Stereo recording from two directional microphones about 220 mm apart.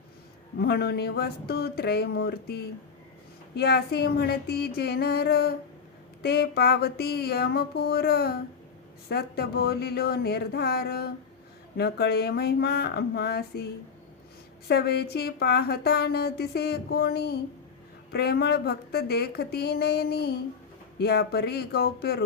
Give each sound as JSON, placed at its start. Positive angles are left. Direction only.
{"t": 0.6, "sound": "a woman's voice", "side_deg": 45}
{"t": 14.7, "sound": "a woman's voice", "side_deg": 45}